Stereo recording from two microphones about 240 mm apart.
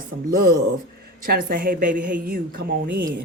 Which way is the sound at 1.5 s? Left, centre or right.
Right.